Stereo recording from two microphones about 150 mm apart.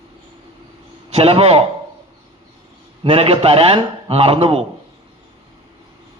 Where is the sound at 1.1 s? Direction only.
40° right (ahead or behind).